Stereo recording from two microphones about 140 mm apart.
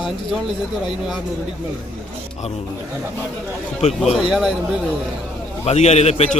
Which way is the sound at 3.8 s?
50° left (ahead or behind).